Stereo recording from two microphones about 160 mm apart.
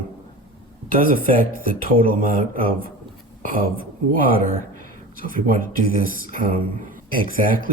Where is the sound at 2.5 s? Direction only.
60° right (ahead or behind).